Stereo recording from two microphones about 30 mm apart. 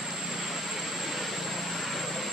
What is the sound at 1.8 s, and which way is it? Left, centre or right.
Vehicle, centre.